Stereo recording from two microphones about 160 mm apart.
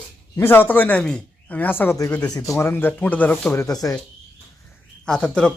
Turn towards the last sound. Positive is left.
turn(degrees=5)  # may be behind; listen again after turning